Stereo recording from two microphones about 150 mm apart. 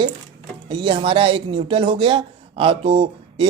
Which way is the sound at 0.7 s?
35° right (ahead or behind).